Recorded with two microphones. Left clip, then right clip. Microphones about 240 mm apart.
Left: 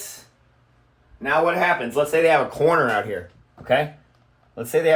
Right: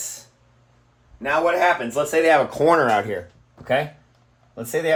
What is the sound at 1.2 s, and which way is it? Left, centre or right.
Speech, right.